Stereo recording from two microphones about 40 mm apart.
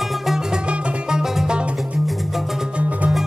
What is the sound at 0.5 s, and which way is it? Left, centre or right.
Music, right.